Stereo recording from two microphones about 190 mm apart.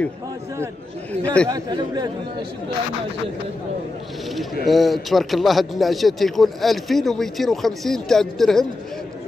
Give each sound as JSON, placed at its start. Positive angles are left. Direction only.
{"t": 1.2, "sound": "a man's voice", "side_deg": 5}
{"t": 1.5, "sound": "speech", "side_deg": -20}
{"t": 4.6, "sound": "a man's voice", "side_deg": 0}